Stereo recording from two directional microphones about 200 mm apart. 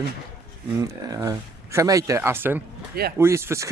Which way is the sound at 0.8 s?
15° right (ahead or behind).